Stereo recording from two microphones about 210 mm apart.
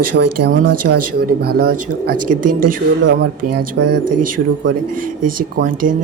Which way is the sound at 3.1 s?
55° right (ahead or behind).